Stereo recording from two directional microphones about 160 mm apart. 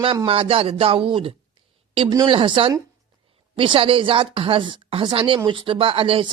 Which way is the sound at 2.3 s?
30° right (ahead or behind).